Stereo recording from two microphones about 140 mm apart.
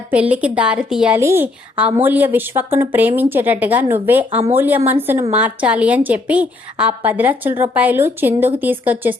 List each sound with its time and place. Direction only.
0.1 s a woman's voice: 10° right (ahead or behind)
1.2 s a woman's voice: 20° right (ahead or behind)